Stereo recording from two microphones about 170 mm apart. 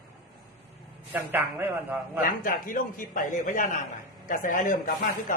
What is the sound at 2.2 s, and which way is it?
A man's voice, 55° left (ahead or behind).